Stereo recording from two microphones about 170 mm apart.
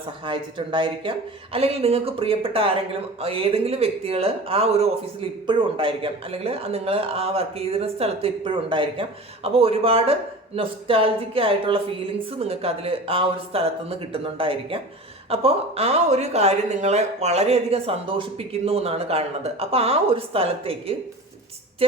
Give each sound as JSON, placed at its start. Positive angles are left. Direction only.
{"t": 0.3, "sound": "speech", "side_deg": -30}